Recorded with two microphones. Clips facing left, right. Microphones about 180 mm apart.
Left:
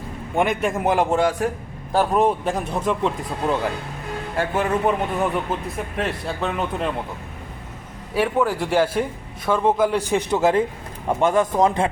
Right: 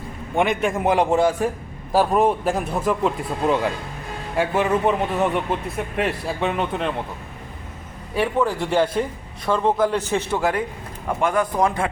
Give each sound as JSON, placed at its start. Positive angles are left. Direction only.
{"t": 0.3, "sound": "a man's voice", "side_deg": 0}
{"t": 4.5, "sound": "a man's voice", "side_deg": 5}
{"t": 8.1, "sound": "a man's voice", "side_deg": 5}